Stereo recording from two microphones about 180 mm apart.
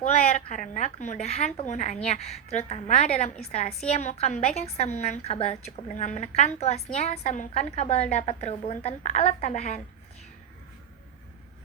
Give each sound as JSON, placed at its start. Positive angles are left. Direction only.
{"t": 0.0, "sound": "a woman's voice", "side_deg": 40}